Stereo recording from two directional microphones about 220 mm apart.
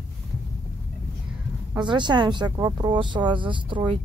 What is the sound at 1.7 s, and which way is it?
Speech, 20° right (ahead or behind).